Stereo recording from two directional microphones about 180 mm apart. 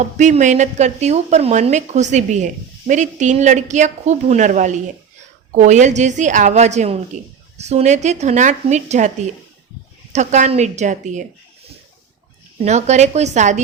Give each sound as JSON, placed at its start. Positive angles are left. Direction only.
{"t": 0.0, "sound": "speech", "side_deg": -40}
{"t": 12.6, "sound": "speech", "side_deg": -40}